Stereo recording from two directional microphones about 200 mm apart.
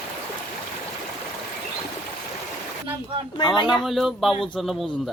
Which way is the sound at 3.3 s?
25° left (ahead or behind).